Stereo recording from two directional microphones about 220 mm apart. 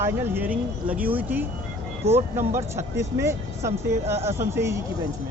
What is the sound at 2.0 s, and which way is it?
Speech, 30° right (ahead or behind).